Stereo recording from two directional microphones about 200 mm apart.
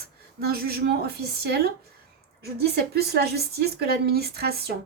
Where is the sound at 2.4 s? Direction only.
50° right (ahead or behind).